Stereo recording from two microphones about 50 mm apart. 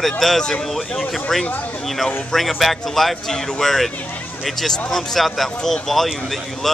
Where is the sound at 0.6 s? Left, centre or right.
Centre.